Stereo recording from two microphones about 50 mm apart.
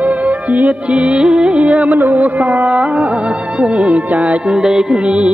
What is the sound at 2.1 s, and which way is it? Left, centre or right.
Carnatic music, right.